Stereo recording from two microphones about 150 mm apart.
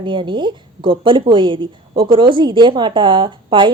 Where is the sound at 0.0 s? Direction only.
35° right (ahead or behind).